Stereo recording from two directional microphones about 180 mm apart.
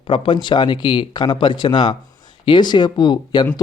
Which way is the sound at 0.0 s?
30° left (ahead or behind).